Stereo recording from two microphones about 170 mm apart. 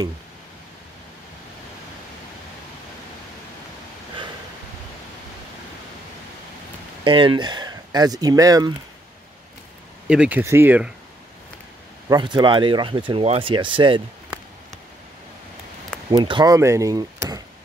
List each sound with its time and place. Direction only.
7.1 s speech: 30° right (ahead or behind)
10.0 s speech: 5° right (ahead or behind)
12.1 s speech: 25° right (ahead or behind)
16.1 s speech: 25° right (ahead or behind)